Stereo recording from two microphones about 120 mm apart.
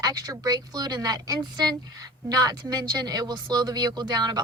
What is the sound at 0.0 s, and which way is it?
Speech, 30° right (ahead or behind).